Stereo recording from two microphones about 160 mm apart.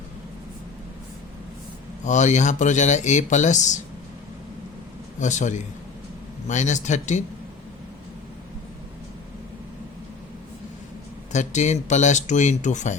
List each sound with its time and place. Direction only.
2.0 s speech: 50° left (ahead or behind)
5.2 s speech: 50° left (ahead or behind)
11.3 s speech: 45° left (ahead or behind)